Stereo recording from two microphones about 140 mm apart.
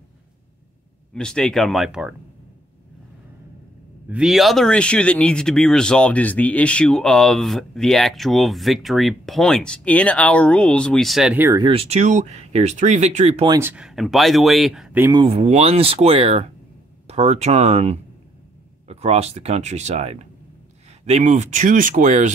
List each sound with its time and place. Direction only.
1.1 s speech: 5° left (ahead or behind)
4.1 s speech: 5° right (ahead or behind)
11.5 s speech: 40° right (ahead or behind)
13.6 s speech: 15° right (ahead or behind)
13.8 s speech: centre (ahead or behind)
15.1 s speech: 45° right (ahead or behind)